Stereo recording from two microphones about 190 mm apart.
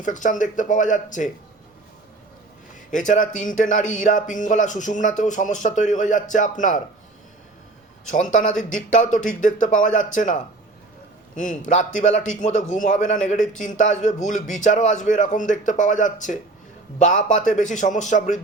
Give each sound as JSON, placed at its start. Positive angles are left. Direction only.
{"t": 0.0, "sound": "speech", "side_deg": 40}
{"t": 2.9, "sound": "speech", "side_deg": 40}
{"t": 8.1, "sound": "speech", "side_deg": 40}